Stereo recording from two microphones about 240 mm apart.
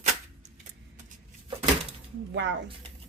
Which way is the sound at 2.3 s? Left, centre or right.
Right.